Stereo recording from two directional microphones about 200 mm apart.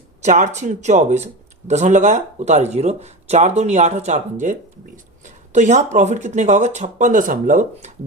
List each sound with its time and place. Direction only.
0.2 s speech: 35° right (ahead or behind)